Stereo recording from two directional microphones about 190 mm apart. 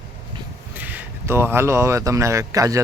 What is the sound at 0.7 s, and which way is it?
Speech, 10° right (ahead or behind).